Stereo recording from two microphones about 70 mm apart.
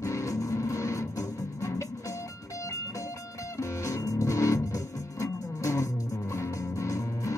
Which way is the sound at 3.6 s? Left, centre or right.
Left.